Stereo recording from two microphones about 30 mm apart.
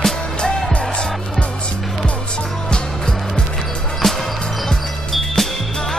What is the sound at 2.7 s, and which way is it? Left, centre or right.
Music, left.